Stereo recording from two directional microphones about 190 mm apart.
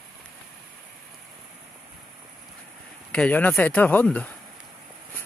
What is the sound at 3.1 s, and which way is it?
Speech, 5° left (ahead or behind).